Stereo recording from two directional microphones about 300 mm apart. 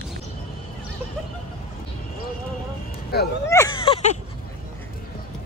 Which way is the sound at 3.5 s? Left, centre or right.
Centre.